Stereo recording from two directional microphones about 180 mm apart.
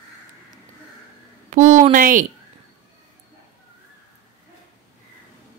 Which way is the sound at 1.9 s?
50° right (ahead or behind).